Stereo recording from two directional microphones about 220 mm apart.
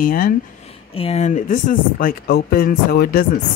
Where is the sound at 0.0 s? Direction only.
40° left (ahead or behind).